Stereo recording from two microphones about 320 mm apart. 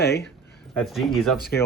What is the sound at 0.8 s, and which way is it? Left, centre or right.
Speech, centre.